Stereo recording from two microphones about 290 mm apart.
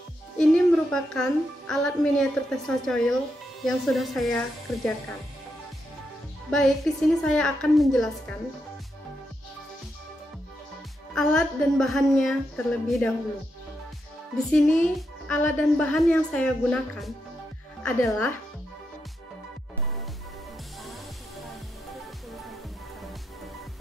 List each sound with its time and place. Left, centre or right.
0.4 s a woman's voice: centre
6.5 s a woman's voice: centre
11.1 s a woman's voice: centre
14.5 s a woman's voice: centre